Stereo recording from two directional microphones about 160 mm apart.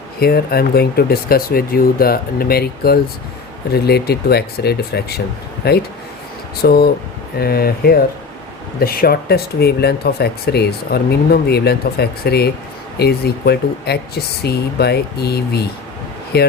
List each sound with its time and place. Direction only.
0.2 s speech: 75° left (ahead or behind)